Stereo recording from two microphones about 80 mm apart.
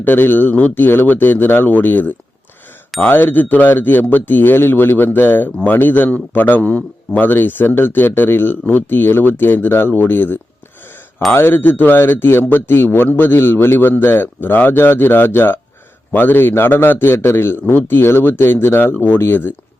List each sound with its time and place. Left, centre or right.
0.0 s a man's voice: left